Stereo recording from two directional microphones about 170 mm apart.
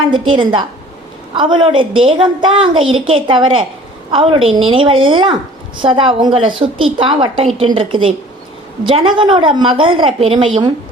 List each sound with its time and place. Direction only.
0.0 s a woman's voice: 30° right (ahead or behind)